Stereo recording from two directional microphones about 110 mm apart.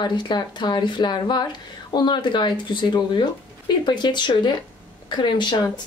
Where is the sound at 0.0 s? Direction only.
45° left (ahead or behind).